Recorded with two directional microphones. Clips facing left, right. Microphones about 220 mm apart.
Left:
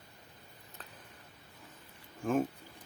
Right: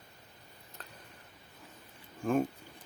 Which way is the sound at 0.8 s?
Centre (ahead or behind).